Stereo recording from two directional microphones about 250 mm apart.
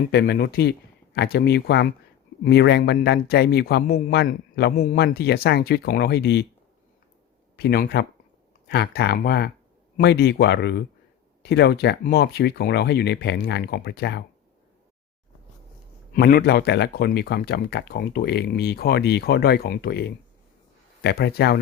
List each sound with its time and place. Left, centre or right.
0.1 s a man's voice: left
7.5 s a man's voice: left
16.1 s a man's voice: left